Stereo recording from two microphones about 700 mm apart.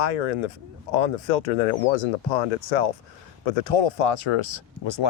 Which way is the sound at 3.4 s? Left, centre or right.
Left.